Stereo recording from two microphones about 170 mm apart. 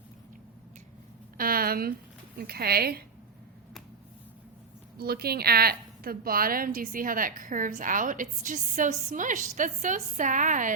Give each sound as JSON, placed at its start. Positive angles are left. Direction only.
{"t": 1.4, "sound": "a sound", "side_deg": -60}
{"t": 2.4, "sound": "a woman's voice", "side_deg": -65}
{"t": 4.9, "sound": "a woman's voice", "side_deg": -65}